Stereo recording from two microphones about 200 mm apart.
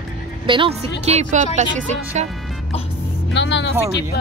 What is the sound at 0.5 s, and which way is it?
Speech, 30° right (ahead or behind).